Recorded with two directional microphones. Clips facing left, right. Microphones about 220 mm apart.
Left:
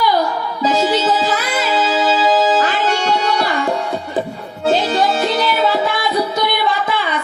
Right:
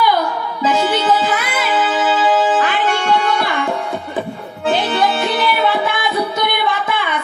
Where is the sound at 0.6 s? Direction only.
35° left (ahead or behind).